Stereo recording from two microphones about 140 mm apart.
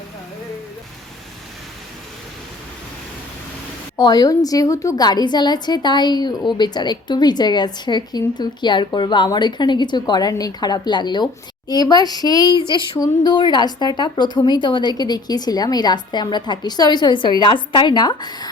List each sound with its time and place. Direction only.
3.9 s a woman's voice: 30° left (ahead or behind)